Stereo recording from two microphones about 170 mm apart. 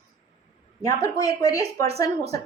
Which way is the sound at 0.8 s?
20° left (ahead or behind).